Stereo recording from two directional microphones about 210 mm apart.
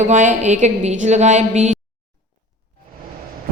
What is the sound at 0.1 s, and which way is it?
A woman's voice, 35° right (ahead or behind).